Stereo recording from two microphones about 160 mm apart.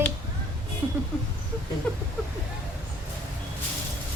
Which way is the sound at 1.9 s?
5° left (ahead or behind).